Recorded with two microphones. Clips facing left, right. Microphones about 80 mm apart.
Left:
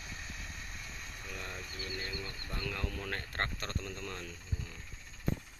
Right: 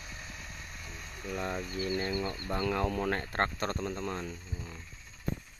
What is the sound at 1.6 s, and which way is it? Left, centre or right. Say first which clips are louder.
Speech: right 9 dB; right.